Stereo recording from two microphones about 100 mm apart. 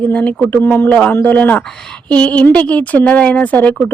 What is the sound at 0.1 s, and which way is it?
Speech, 15° left (ahead or behind).